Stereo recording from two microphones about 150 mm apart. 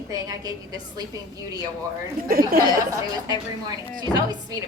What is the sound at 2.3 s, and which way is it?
Speech, 75° right (ahead or behind).